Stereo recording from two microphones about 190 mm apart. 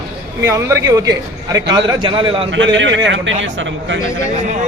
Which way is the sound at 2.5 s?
75° right (ahead or behind).